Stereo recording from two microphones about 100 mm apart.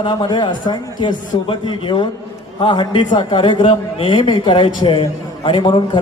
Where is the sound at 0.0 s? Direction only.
45° left (ahead or behind).